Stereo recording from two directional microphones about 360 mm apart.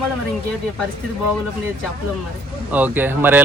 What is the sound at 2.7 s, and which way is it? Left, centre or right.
Speech, centre.